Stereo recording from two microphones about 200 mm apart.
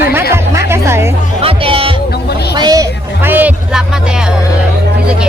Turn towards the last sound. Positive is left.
turn(degrees=-10)  # may be behind; listen again after turning